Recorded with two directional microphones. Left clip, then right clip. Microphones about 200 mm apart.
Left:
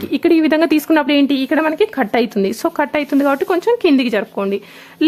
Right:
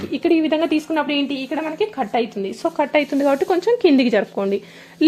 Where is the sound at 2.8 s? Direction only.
15° left (ahead or behind).